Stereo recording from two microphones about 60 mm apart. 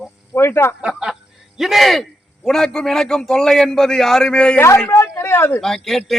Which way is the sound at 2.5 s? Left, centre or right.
Centre.